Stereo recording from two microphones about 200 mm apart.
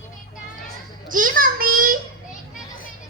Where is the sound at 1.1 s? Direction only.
45° right (ahead or behind).